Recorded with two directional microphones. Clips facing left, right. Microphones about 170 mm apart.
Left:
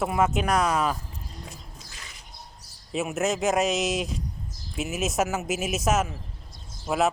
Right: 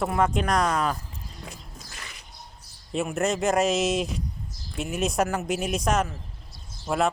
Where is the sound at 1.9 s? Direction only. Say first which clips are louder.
Right 3 dB; 65° right (ahead or behind).